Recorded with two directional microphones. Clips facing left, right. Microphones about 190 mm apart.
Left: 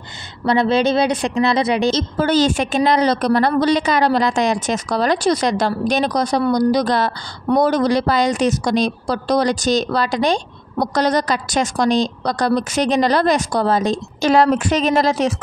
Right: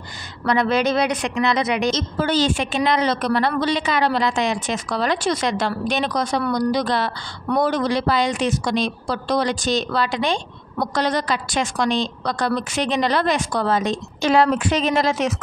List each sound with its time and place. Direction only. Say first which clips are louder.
0.5 s a woman's voice: left 3 dB; 30° left (ahead or behind)
2.1 s a woman's voice: left 4 dB; 45° left (ahead or behind)